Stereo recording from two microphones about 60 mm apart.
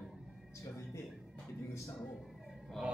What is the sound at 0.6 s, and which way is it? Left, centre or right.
Speech, left.